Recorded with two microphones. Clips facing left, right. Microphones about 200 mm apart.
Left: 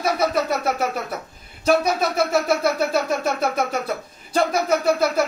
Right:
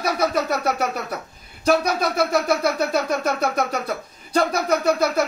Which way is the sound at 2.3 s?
Centre (ahead or behind).